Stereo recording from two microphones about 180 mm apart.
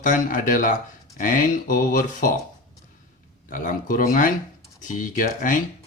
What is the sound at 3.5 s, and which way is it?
Speech, 50° left (ahead or behind).